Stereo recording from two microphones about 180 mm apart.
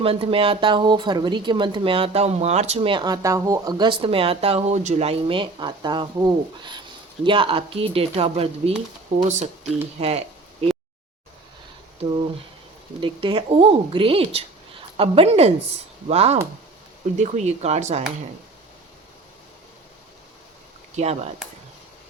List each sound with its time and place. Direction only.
0.0 s a woman's voice: 30° right (ahead or behind)
10.0 s a sound: 35° right (ahead or behind)
13.0 s a woman's voice: 30° right (ahead or behind)
20.9 s a woman's voice: 35° right (ahead or behind)